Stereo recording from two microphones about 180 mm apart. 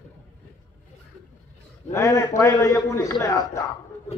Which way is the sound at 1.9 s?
15° left (ahead or behind).